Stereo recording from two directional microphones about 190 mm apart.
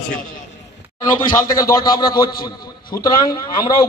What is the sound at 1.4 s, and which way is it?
A man's voice, 20° left (ahead or behind).